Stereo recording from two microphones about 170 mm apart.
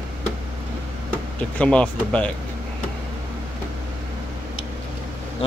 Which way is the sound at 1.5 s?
5° left (ahead or behind).